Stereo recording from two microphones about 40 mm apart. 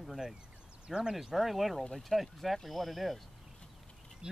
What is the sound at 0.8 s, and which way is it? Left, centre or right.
Speech, centre.